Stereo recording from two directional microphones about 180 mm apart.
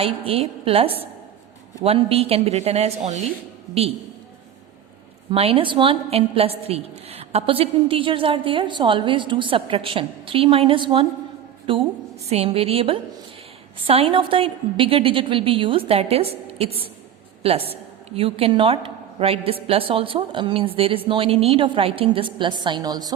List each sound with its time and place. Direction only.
0.0 s a woman's voice: 30° right (ahead or behind)
5.3 s a woman's voice: 30° right (ahead or behind)